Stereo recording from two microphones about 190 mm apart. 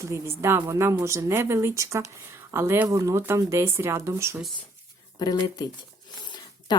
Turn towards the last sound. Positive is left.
turn(degrees=20)  # may be behind; listen again after turning